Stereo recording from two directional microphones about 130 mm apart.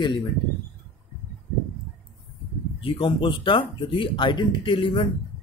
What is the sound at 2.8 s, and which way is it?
Speech, 45° left (ahead or behind).